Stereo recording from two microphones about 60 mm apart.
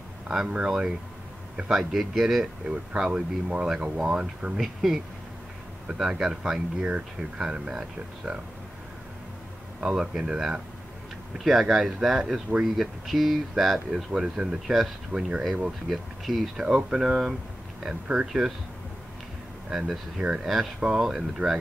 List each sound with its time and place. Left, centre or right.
0.3 s speech: centre
2.7 s speech: centre
4.6 s speech: centre
6.8 s speech: right
9.8 s speech: centre
15.9 s speech: centre
20.2 s speech: centre